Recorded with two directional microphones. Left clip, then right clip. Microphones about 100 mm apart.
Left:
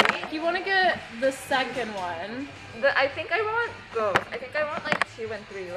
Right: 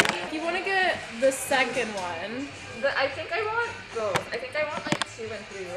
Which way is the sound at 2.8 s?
25° left (ahead or behind).